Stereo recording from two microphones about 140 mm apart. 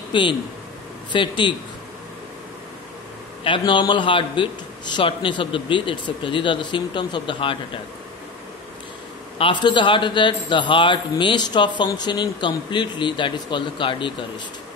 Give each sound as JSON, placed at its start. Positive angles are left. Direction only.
{"t": 0.1, "sound": "a man's voice", "side_deg": 35}
{"t": 3.4, "sound": "a man's voice", "side_deg": 35}
{"t": 9.4, "sound": "a man's voice", "side_deg": 35}